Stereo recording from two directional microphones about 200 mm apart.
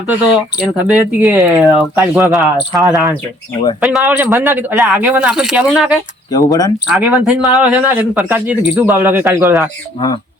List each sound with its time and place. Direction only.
0.1 s a man's voice: 10° right (ahead or behind)
2.8 s a man's voice: 15° right (ahead or behind)
3.8 s a man's voice: centre (ahead or behind)
6.3 s speech: 20° left (ahead or behind)
6.9 s a man's voice: 5° right (ahead or behind)